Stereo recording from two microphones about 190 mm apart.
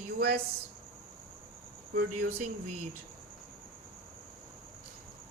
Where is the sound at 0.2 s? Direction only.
55° right (ahead or behind).